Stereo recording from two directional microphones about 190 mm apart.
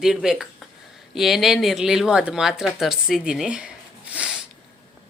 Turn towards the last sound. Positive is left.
turn(degrees=-5)  # may be behind; listen again after turning